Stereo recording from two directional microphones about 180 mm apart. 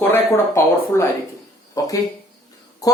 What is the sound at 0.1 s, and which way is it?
Speech, 15° left (ahead or behind).